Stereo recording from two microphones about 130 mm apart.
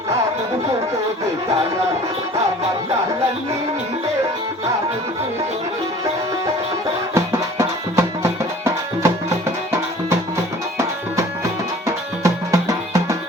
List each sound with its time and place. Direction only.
7.6 s music: 20° right (ahead or behind)
11.9 s music: 25° right (ahead or behind)